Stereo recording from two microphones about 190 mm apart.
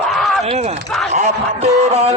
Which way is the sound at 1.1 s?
35° right (ahead or behind).